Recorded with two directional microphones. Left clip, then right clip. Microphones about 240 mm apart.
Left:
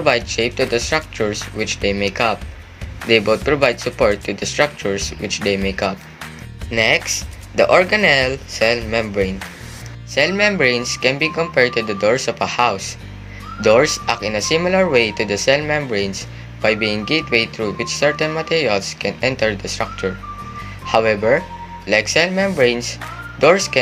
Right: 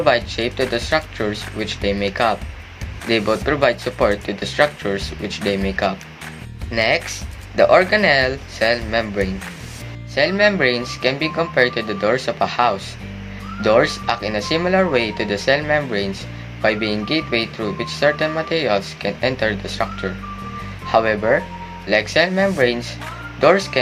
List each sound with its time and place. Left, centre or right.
0.0 s speech: left